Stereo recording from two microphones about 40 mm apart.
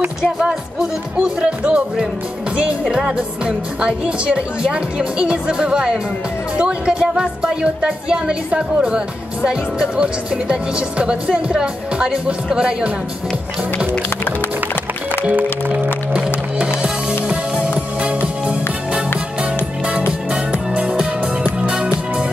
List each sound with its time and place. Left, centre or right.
1.2 s speech: right
3.2 s speech: right
16.5 s music: right
20.1 s music: right